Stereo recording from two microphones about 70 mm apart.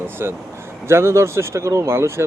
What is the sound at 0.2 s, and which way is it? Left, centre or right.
Speech, right.